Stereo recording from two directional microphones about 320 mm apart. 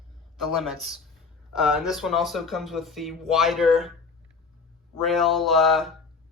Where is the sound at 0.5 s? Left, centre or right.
Centre.